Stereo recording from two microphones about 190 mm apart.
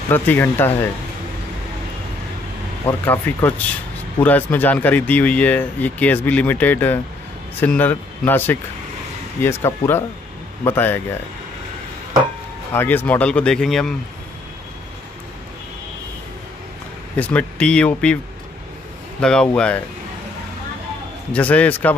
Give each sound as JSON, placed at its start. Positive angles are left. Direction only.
{"t": 0.1, "sound": "speech", "side_deg": 10}
{"t": 3.1, "sound": "speech", "side_deg": 10}
{"t": 12.7, "sound": "speech", "side_deg": 10}
{"t": 17.2, "sound": "speech", "side_deg": 5}
{"t": 21.3, "sound": "speech", "side_deg": 5}